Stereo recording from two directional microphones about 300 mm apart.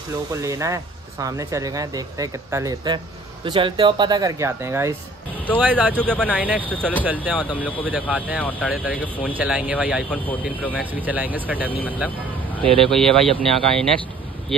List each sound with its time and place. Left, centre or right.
0.3 s speech: centre